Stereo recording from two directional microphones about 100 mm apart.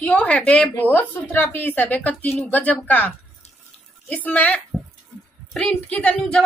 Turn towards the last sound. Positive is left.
turn(degrees=15)  # may be behind; listen again after turning